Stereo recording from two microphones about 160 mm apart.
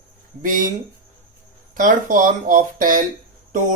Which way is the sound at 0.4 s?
55° right (ahead or behind).